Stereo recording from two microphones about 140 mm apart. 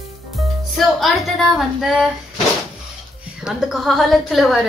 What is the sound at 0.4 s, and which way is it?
Speech, centre (ahead or behind).